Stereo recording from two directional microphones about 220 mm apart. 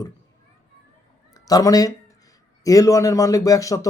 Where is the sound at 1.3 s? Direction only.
15° left (ahead or behind).